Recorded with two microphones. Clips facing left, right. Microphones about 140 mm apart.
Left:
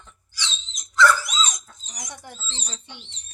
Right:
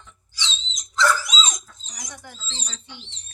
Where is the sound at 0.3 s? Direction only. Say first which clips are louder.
Right 1 dB; 20° right (ahead or behind).